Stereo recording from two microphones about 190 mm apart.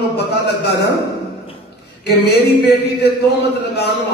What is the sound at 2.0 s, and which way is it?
Speech, 60° left (ahead or behind).